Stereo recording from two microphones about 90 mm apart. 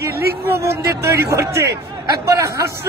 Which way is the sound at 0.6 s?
35° right (ahead or behind).